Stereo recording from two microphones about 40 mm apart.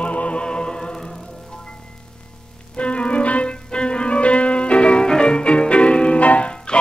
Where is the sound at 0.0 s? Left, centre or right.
Left.